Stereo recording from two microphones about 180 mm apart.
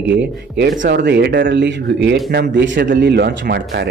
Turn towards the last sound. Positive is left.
turn(degrees=-75)  # may be behind; listen again after turning